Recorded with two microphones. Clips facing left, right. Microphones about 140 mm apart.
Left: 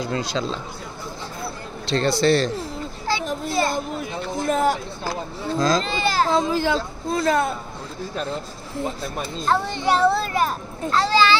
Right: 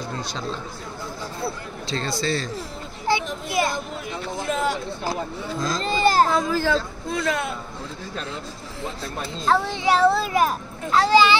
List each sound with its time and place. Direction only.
0.0 s speech: 90° left
1.9 s a man's voice: 70° left (ahead or behind)
3.1 s children playing: 20° right (ahead or behind)
3.4 s speech: 15° right (ahead or behind)
4.4 s speech: 45° left (ahead or behind)
5.6 s speech: 90° left
5.9 s a child's voice: 45° right (ahead or behind)
6.3 s speech: 20° left (ahead or behind)
7.1 s speech: 35° left (ahead or behind)
8.3 s speech: 50° left (ahead or behind)
9.5 s speech: centre (ahead or behind)